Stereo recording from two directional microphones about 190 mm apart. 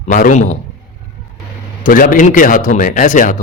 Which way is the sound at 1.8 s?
45° left (ahead or behind).